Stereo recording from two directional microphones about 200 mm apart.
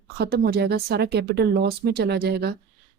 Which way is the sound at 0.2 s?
55° right (ahead or behind).